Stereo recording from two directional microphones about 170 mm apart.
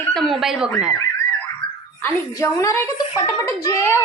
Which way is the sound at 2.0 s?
15° left (ahead or behind).